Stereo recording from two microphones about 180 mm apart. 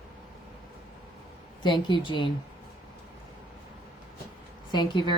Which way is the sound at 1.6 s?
25° left (ahead or behind).